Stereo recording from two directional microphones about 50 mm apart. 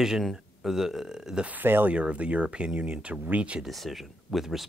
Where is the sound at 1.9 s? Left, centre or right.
Right.